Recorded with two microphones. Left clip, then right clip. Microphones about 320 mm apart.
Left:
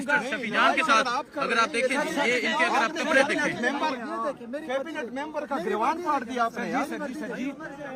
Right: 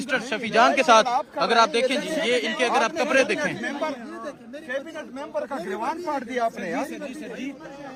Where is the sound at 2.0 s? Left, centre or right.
Centre.